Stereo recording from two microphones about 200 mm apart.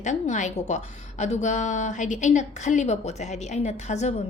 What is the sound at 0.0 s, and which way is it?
A woman's voice, 35° left (ahead or behind).